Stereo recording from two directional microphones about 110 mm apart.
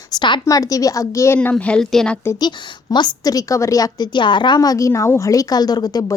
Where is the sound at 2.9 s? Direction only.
35° left (ahead or behind).